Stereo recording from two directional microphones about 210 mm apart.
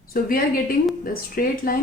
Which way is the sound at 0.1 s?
45° left (ahead or behind).